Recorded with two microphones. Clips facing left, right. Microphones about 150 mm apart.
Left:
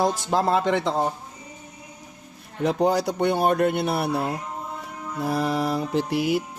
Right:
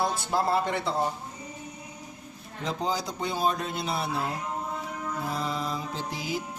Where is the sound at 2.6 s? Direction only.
65° left (ahead or behind).